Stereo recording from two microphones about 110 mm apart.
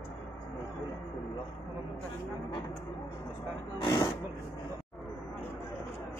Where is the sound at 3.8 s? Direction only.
40° left (ahead or behind).